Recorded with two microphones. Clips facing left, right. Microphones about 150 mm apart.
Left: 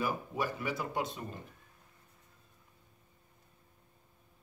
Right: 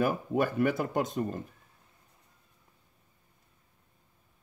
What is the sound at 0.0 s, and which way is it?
Speech, 55° right (ahead or behind).